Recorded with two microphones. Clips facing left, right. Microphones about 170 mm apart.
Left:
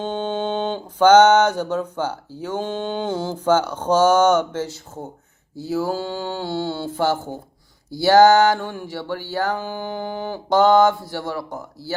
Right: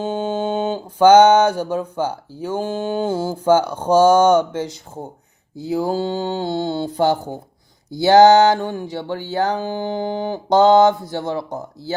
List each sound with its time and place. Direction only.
0.0 s mantra: 10° right (ahead or behind)
7.9 s music: 20° right (ahead or behind)